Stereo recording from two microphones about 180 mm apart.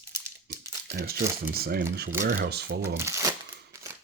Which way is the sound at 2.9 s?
15° right (ahead or behind).